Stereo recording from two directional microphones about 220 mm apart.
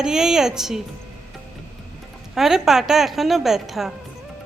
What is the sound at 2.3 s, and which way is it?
A woman's voice, centre (ahead or behind).